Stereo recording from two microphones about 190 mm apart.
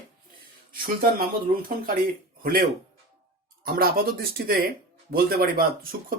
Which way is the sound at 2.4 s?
50° right (ahead or behind).